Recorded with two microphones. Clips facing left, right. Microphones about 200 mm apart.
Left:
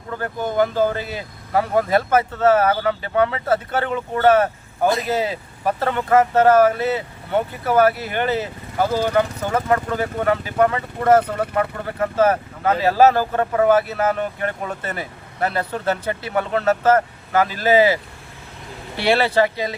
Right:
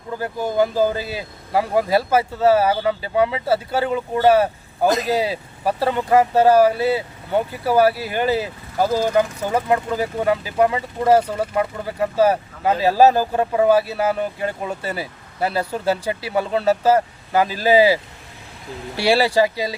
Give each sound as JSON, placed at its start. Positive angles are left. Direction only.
{"t": 0.1, "sound": "speech", "side_deg": -10}
{"t": 7.9, "sound": "speech", "side_deg": -35}
{"t": 8.8, "sound": "speech", "side_deg": -10}